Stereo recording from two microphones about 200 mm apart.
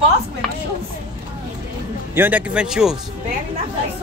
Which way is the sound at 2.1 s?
10° right (ahead or behind).